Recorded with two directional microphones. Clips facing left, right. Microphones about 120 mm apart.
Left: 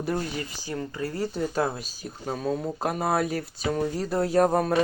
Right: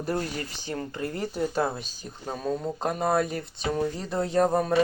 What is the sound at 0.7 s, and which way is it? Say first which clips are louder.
Speech: left 1 dB; 35° right (ahead or behind).